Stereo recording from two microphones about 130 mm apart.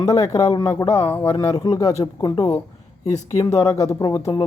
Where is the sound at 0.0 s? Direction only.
25° left (ahead or behind).